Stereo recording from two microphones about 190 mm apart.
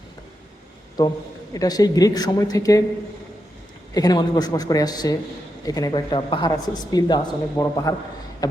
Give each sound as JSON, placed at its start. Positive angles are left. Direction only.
{"t": 1.0, "sound": "a woman's voice", "side_deg": 20}
{"t": 3.9, "sound": "a woman's voice", "side_deg": 20}